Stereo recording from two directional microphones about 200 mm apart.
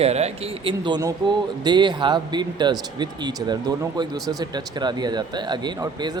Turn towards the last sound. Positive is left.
turn(degrees=-20)  # may be behind; listen again after turning